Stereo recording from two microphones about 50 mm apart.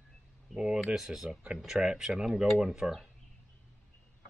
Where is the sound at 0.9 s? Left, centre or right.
Centre.